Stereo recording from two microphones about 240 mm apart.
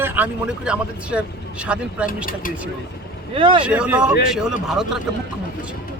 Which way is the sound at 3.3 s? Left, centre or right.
Right.